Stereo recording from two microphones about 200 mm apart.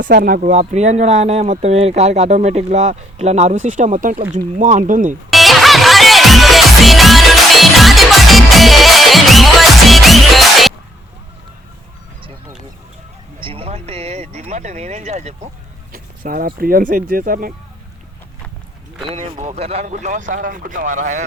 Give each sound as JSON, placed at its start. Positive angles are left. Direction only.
{"t": 0.0, "sound": "speech", "side_deg": -45}
{"t": 5.3, "sound": "music", "side_deg": 0}
{"t": 13.4, "sound": "music", "side_deg": -30}
{"t": 15.9, "sound": "a sound", "side_deg": -45}
{"t": 16.6, "sound": "speech", "side_deg": -45}
{"t": 19.0, "sound": "speech", "side_deg": -35}